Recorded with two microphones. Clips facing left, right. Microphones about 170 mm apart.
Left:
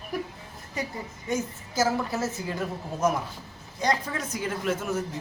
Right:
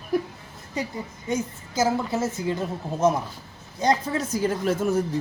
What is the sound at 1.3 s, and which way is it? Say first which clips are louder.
A woman's voice: right 2 dB; 20° right (ahead or behind).